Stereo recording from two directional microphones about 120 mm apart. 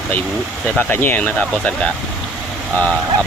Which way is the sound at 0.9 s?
15° left (ahead or behind).